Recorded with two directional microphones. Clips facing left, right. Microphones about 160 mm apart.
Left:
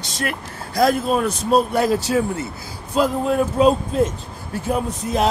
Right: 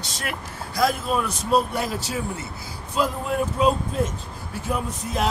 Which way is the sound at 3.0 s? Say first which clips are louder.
Left 6 dB; 30° left (ahead or behind).